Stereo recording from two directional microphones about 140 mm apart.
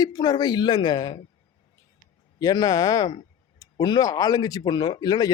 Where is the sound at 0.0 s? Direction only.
30° left (ahead or behind).